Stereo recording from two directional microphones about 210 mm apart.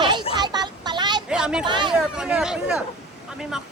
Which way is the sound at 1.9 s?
5° right (ahead or behind).